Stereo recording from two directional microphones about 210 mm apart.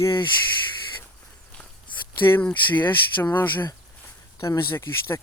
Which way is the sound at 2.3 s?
10° left (ahead or behind).